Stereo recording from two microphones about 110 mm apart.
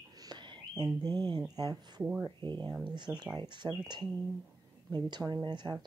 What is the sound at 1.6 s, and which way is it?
Speech, 35° right (ahead or behind).